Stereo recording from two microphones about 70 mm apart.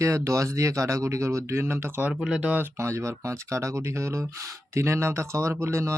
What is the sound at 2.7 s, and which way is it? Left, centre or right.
Speech, right.